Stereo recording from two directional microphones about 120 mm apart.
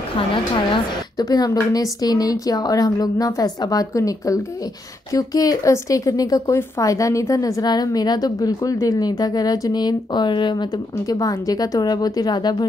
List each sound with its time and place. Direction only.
1.1 s speech: 30° left (ahead or behind)